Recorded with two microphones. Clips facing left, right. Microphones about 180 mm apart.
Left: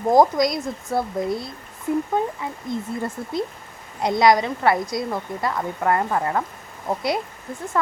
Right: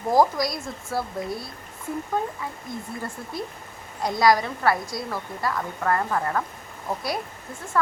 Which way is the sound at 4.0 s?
20° left (ahead or behind).